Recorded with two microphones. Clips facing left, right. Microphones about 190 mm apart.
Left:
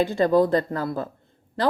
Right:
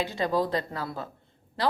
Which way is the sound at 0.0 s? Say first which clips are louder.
Left 8 dB; 50° left (ahead or behind).